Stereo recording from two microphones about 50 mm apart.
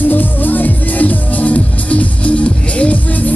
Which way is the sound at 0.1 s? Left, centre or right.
Left.